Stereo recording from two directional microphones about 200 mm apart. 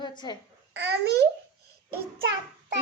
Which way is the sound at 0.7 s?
60° right (ahead or behind).